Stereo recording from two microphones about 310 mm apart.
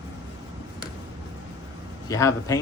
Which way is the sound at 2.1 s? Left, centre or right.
Centre.